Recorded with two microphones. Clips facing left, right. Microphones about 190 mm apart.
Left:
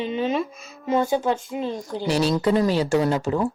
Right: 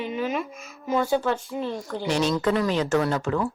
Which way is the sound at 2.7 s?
35° left (ahead or behind).